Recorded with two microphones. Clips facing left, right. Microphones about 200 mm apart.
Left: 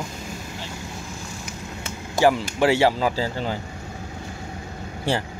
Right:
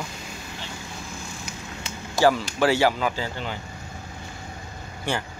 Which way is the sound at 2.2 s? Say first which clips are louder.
Left 1 dB; 20° left (ahead or behind).